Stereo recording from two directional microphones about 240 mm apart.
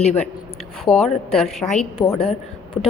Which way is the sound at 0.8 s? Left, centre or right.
Centre.